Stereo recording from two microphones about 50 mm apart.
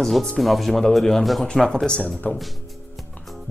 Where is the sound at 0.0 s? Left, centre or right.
Centre.